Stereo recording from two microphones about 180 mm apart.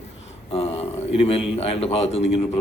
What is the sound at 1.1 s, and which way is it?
A man's voice, 30° left (ahead or behind).